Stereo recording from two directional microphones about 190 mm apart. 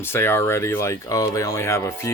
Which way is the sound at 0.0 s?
10° left (ahead or behind).